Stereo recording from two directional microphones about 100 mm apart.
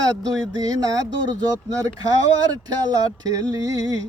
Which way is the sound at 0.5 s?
40° right (ahead or behind).